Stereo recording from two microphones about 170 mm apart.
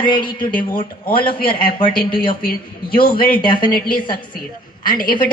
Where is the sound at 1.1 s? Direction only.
30° left (ahead or behind).